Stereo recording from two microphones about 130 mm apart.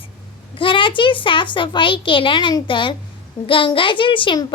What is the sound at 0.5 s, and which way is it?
Speech, 40° left (ahead or behind).